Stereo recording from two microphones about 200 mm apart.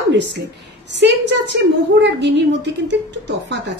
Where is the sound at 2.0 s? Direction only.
60° right (ahead or behind).